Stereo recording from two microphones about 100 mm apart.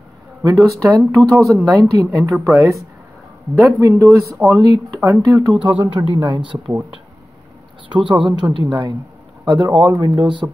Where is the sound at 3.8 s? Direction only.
30° right (ahead or behind).